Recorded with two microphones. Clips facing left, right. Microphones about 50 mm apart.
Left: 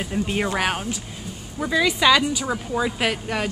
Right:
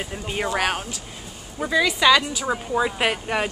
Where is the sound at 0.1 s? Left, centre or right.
Centre.